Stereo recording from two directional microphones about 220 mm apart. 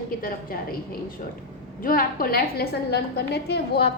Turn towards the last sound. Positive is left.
turn(degrees=45)  # may be behind; listen again after turning